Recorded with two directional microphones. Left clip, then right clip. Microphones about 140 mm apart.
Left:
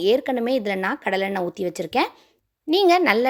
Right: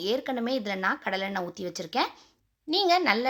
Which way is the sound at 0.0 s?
45° left (ahead or behind).